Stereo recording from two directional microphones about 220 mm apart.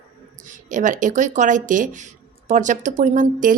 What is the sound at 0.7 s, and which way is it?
A woman's voice, 35° right (ahead or behind).